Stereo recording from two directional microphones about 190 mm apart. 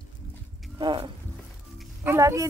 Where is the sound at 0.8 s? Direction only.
25° right (ahead or behind).